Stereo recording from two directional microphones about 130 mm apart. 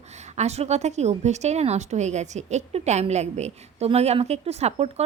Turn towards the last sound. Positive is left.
turn(degrees=-55)  # may be behind; listen again after turning